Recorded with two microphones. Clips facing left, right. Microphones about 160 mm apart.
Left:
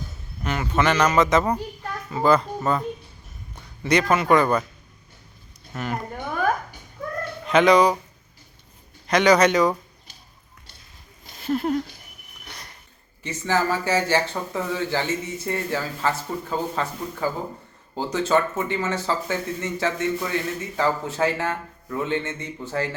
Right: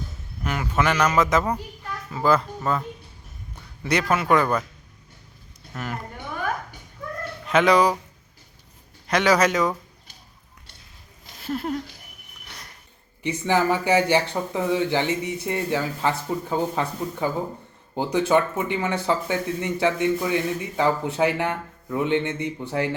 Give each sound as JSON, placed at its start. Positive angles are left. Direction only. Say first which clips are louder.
{"t": 0.4, "sound": "a sound", "louder": "left 1 dB", "side_deg": -5}
{"t": 1.1, "sound": "speech", "louder": "left 2 dB", "side_deg": -5}
{"t": 3.8, "sound": "speech", "louder": "left 2 dB", "side_deg": -5}
{"t": 5.7, "sound": "speech", "louder": "left 2 dB", "side_deg": 5}
{"t": 7.4, "sound": "speech", "louder": "left 2 dB", "side_deg": -5}
{"t": 9.0, "sound": "speech", "louder": "left 3 dB", "side_deg": -5}
{"t": 11.3, "sound": "speech", "louder": "left 4 dB", "side_deg": 0}
{"t": 13.2, "sound": "speech", "louder": "right 2 dB", "side_deg": -15}